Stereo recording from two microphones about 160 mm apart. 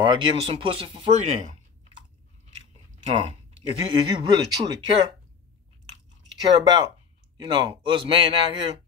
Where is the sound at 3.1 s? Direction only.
35° right (ahead or behind).